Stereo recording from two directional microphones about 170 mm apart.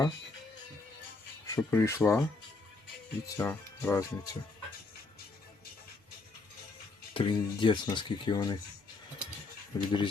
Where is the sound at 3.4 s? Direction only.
10° left (ahead or behind).